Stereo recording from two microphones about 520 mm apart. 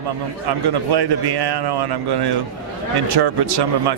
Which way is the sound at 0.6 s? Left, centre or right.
Right.